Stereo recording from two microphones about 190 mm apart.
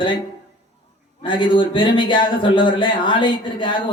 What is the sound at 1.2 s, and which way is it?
Speech, 25° left (ahead or behind).